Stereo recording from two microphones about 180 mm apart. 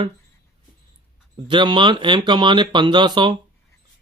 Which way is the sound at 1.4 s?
25° right (ahead or behind).